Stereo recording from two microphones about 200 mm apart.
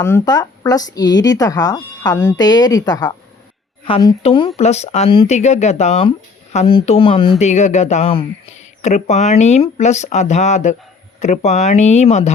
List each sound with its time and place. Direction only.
0.0 s speech: 10° left (ahead or behind); by 12.3 s 35° left (ahead or behind)